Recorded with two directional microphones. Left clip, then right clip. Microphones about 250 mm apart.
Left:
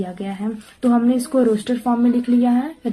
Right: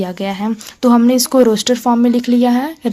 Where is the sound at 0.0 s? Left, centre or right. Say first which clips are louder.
Right 7 dB; right.